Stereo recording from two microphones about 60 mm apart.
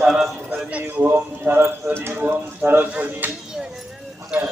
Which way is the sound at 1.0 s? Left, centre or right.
Right.